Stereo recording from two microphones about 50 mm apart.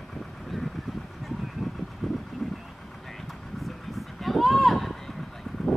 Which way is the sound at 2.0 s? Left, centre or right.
Centre.